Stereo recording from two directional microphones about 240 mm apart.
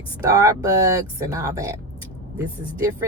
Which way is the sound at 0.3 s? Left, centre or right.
Centre.